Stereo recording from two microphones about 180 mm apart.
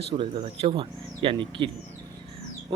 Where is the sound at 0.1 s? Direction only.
30° right (ahead or behind).